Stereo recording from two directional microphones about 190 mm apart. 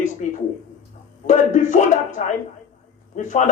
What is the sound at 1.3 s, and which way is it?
A man's voice, 40° left (ahead or behind).